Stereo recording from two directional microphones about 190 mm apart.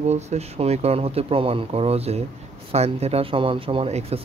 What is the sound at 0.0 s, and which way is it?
Speech, 35° right (ahead or behind).